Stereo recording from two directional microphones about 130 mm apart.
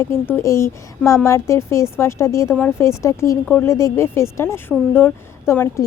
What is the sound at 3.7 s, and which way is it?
Speech, 20° left (ahead or behind).